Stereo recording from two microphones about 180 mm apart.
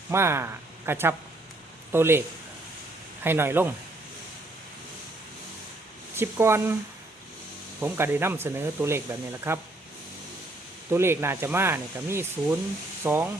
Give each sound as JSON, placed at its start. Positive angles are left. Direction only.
{"t": 0.1, "sound": "speech", "side_deg": -15}
{"t": 3.2, "sound": "speech", "side_deg": -15}
{"t": 6.1, "sound": "speech", "side_deg": -15}
{"t": 7.8, "sound": "speech", "side_deg": -15}
{"t": 10.9, "sound": "speech", "side_deg": -15}